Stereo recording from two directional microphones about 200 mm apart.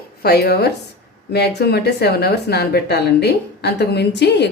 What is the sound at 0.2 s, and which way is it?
A woman's voice, 50° left (ahead or behind).